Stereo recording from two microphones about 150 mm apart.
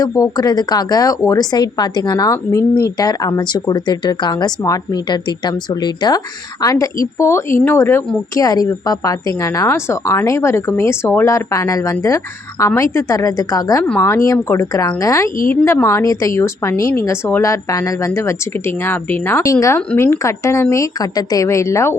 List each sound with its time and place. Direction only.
0.0 s a woman's voice: 25° left (ahead or behind)